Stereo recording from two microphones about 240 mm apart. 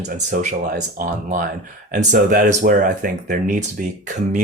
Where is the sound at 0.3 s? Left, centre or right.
Right.